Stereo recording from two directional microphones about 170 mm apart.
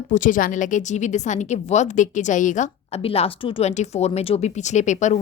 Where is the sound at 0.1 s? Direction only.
50° left (ahead or behind).